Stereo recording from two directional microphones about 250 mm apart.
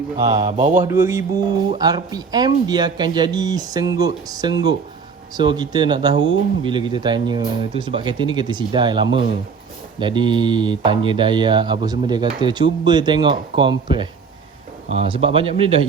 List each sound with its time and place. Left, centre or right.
0.2 s speech: centre
0.9 s speech: centre